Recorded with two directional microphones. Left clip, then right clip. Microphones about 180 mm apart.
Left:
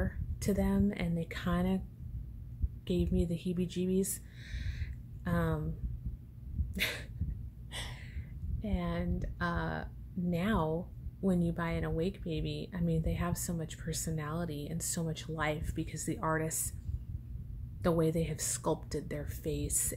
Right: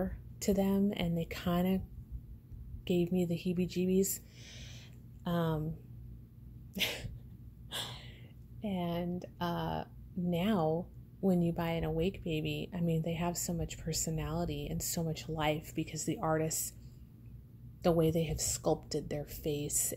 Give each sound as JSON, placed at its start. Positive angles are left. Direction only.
{"t": 0.0, "sound": "speech", "side_deg": -30}
{"t": 2.8, "sound": "speech", "side_deg": -25}
{"t": 6.7, "sound": "dog", "side_deg": -25}
{"t": 7.7, "sound": "a sound", "side_deg": -45}
{"t": 8.5, "sound": "speech", "side_deg": -20}
{"t": 17.8, "sound": "speech", "side_deg": -25}